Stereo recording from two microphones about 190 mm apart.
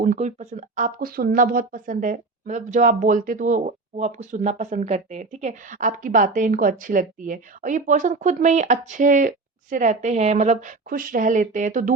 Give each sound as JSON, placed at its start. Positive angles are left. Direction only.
{"t": 0.0, "sound": "speech", "side_deg": -40}